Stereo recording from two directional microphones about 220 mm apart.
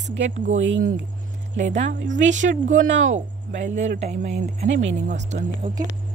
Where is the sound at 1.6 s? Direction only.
30° right (ahead or behind).